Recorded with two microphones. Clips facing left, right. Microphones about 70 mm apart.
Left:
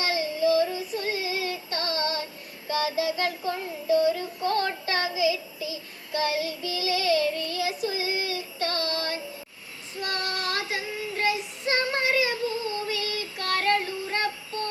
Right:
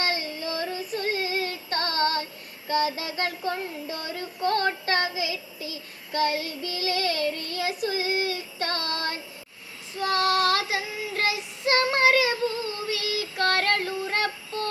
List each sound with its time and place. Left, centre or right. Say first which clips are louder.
0.0 s music: left 4 dB; right
2.6 s child singing: even; right
10.0 s child singing: right 8 dB; right
12.9 s child singing: right 1 dB; right